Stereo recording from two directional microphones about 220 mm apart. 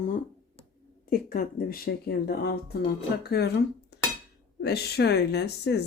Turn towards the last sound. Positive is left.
turn(degrees=50)  # may be behind; listen again after turning